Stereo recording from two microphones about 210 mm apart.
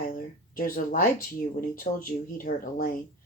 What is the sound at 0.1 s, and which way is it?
Speech, 40° left (ahead or behind).